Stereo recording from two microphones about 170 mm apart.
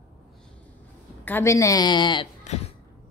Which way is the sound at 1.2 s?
15° left (ahead or behind).